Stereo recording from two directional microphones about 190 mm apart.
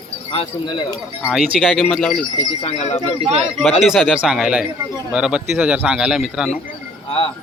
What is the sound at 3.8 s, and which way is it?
Speech, centre (ahead or behind).